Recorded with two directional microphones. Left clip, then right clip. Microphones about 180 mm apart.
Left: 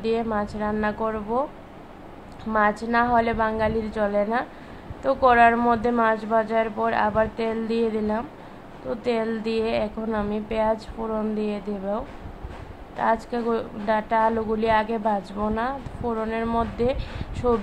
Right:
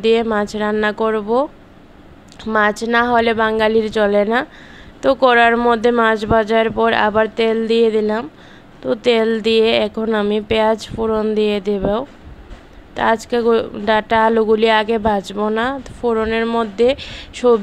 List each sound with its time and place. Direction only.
0.0 s speech: 50° right (ahead or behind)